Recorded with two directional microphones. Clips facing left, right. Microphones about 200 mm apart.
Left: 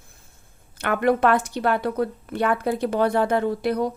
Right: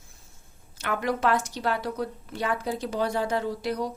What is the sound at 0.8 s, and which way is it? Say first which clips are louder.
A woman's voice: left 7 dB; 60° left (ahead or behind).